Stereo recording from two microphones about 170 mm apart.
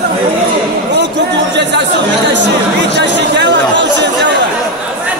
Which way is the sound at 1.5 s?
90° right.